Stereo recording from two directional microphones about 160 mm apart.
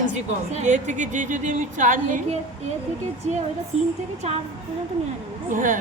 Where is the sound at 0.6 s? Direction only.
50° right (ahead or behind).